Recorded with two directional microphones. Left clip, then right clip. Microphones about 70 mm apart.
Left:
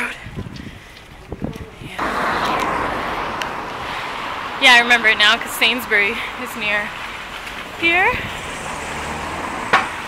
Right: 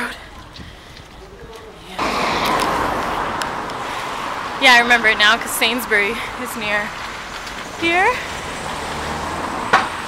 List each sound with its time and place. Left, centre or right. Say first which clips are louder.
2.0 s a sound: right 1 dB; right
2.6 s vehicle: right 2 dB; centre
3.9 s vehicle: right 1 dB; centre
4.6 s speech: even; centre
6.6 s rain: left 1 dB; centre
7.7 s a sound: even; centre
8.6 s vehicle: right 2 dB; centre
9.5 s chop: right 1 dB; left